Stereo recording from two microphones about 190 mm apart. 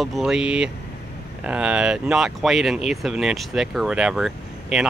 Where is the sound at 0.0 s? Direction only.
Centre (ahead or behind).